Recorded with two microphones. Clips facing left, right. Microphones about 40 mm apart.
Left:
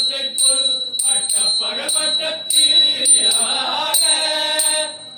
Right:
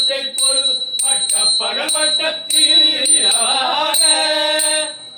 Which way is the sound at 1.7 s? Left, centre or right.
Right.